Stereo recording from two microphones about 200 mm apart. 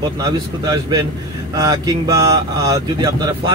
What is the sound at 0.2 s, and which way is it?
A man's voice, 20° right (ahead or behind).